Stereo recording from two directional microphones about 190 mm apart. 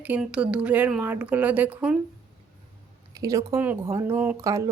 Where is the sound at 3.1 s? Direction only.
20° right (ahead or behind).